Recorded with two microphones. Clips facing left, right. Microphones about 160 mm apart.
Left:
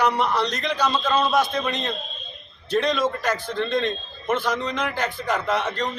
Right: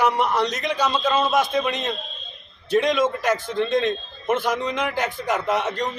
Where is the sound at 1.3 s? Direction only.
20° right (ahead or behind).